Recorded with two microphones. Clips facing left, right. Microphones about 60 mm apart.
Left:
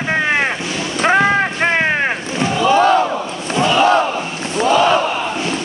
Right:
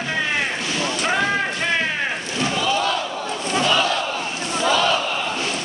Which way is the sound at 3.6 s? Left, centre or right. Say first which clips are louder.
Left 6 dB; left.